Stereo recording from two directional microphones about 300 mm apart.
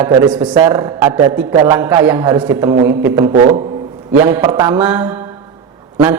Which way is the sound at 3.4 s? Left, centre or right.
Centre.